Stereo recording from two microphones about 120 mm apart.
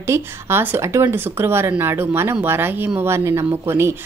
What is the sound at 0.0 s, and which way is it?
A woman's voice, 20° right (ahead or behind).